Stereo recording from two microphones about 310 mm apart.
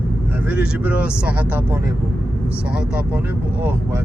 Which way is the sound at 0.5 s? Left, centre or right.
Centre.